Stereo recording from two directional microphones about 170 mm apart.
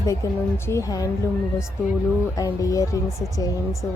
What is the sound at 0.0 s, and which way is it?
A woman's voice, 15° left (ahead or behind).